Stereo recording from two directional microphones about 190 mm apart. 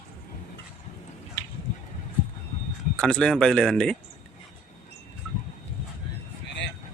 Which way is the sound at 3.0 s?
5° left (ahead or behind).